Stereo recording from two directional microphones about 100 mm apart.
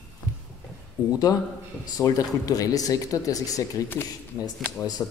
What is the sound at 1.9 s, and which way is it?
Speech, 35° left (ahead or behind).